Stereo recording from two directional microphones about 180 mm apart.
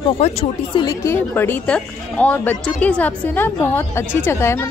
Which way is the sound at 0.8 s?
15° left (ahead or behind).